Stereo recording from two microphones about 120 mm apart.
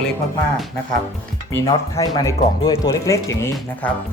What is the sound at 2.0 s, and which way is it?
Speech, 30° left (ahead or behind).